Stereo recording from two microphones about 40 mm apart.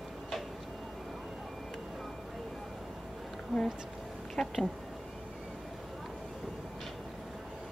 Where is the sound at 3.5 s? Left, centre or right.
Centre.